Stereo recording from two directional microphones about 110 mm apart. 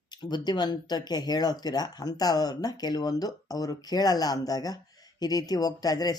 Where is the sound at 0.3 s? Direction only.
40° left (ahead or behind).